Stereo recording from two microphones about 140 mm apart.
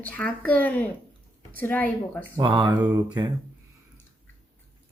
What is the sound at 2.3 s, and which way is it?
Speech, 35° right (ahead or behind).